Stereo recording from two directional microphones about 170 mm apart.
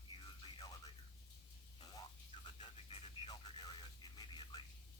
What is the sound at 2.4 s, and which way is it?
Radio, 30° left (ahead or behind).